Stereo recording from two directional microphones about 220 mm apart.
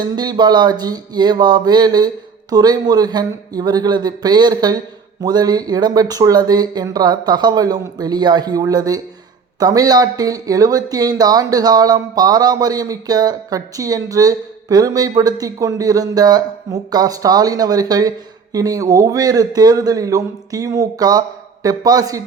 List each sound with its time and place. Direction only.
0.0 s speech: 20° right (ahead or behind)